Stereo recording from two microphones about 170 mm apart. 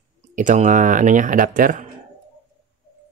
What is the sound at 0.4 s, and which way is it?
Speech, 50° right (ahead or behind).